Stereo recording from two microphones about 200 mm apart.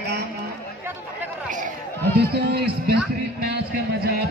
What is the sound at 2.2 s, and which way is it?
Mantra, 55° right (ahead or behind).